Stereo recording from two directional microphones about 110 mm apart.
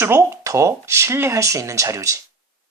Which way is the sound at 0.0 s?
25° right (ahead or behind).